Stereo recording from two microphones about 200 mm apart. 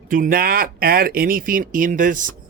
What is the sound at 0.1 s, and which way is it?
Speech, 45° right (ahead or behind).